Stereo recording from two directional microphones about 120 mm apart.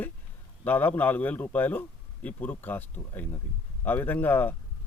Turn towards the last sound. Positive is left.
turn(degrees=15)  # may be behind; listen again after turning